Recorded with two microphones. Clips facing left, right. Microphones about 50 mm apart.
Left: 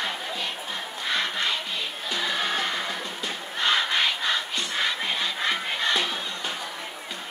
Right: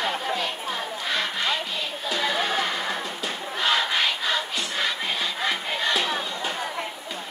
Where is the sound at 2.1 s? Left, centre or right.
Centre.